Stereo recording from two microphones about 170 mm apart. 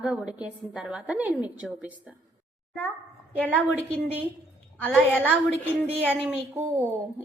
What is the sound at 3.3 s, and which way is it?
Speech, 10° left (ahead or behind).